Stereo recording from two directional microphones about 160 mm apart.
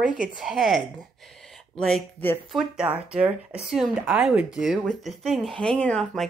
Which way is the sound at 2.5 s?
5° right (ahead or behind).